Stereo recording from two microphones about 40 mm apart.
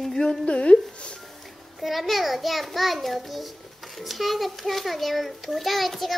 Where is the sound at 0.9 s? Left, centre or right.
Left.